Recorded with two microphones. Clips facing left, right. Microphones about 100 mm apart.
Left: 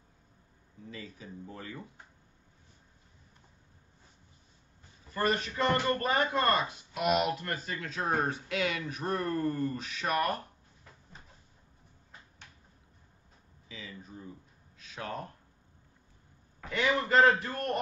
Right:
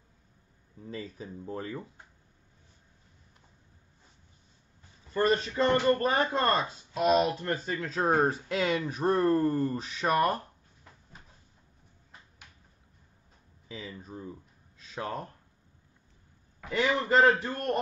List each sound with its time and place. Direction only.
0.8 s speech: 40° right (ahead or behind)
5.1 s speech: 30° right (ahead or behind)
13.7 s a sound: 35° right (ahead or behind)
14.8 s speech: 30° right (ahead or behind)
16.7 s speech: 30° right (ahead or behind)